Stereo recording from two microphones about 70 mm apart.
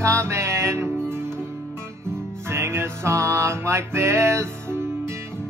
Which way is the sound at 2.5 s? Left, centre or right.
Right.